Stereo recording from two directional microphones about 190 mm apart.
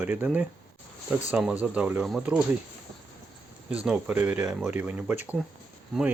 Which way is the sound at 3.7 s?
5° right (ahead or behind).